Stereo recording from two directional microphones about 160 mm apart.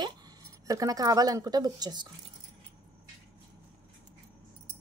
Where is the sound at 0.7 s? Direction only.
20° right (ahead or behind).